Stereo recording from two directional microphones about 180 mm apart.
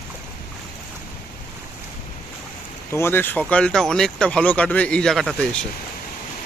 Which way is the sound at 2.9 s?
15° left (ahead or behind).